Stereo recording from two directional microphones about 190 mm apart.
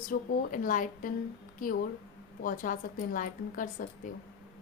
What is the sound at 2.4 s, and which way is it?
A woman's voice, 45° left (ahead or behind).